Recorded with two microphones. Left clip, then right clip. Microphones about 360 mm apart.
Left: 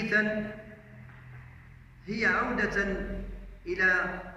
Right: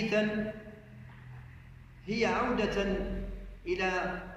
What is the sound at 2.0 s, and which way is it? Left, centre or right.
A man's voice, centre.